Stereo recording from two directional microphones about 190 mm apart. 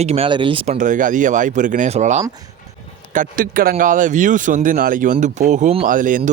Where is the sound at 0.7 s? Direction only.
40° right (ahead or behind).